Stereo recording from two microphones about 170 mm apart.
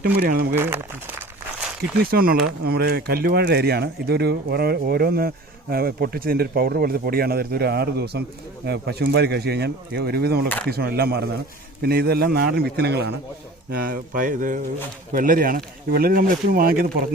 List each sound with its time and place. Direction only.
0.0 s speech: 65° right (ahead or behind)
0.5 s speech: 15° right (ahead or behind)
2.0 s speech: 60° right (ahead or behind); by 13.1 s 75° right (ahead or behind)
13.7 s speech: 60° right (ahead or behind)